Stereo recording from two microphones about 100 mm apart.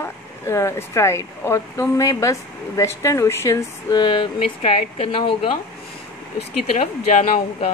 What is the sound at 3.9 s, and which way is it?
Speech, 55° left (ahead or behind).